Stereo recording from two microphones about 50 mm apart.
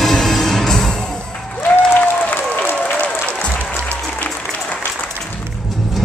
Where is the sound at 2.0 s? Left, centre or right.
Left.